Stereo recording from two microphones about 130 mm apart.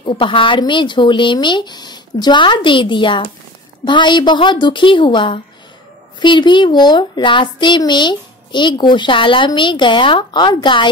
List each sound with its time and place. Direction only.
0.0 s speech: 40° left (ahead or behind)